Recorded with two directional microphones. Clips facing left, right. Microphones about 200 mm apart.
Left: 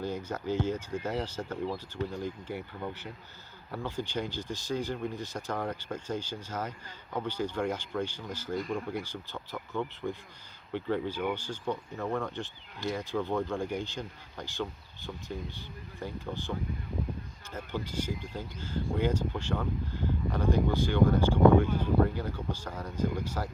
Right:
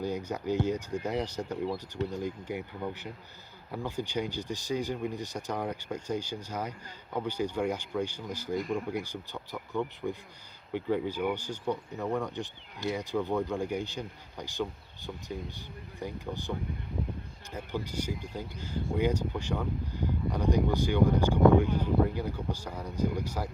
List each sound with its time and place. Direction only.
0.3 s speech: 15° right (ahead or behind)
17.5 s speech: 15° right (ahead or behind)